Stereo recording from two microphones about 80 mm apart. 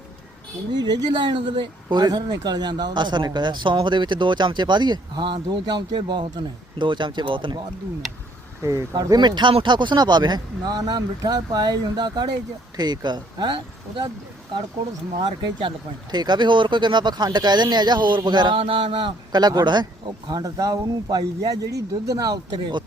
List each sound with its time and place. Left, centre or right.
0.8 s speech: right
9.0 s speech: right
15.2 s speech: right
16.1 s speech: right
20.6 s speech: right